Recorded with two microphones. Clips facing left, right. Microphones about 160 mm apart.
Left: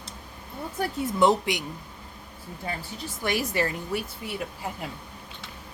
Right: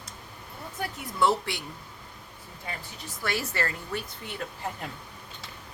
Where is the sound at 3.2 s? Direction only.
15° left (ahead or behind).